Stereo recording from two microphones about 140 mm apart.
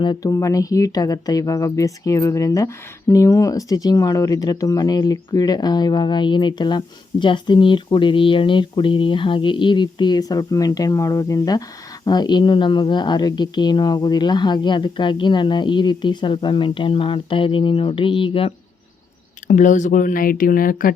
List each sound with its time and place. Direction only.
0.0 s speech: 30° left (ahead or behind)
19.5 s speech: 65° left (ahead or behind); by 20.9 s 90° left